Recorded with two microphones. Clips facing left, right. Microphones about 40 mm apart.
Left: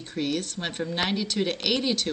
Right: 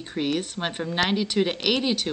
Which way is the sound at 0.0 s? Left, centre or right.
Centre.